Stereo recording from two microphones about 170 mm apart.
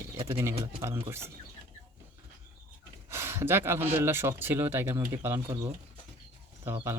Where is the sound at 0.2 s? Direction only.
25° right (ahead or behind).